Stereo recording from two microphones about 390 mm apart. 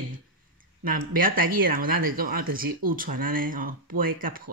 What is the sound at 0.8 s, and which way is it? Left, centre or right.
Speech, right.